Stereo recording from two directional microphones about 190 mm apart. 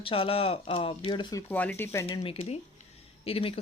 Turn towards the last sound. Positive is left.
turn(degrees=30)  # may be behind; listen again after turning